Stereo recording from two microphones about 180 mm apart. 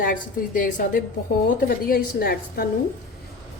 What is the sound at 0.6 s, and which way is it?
A woman's voice, 45° left (ahead or behind).